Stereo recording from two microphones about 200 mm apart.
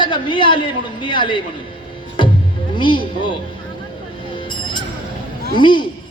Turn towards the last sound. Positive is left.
turn(degrees=25)  # may be behind; listen again after turning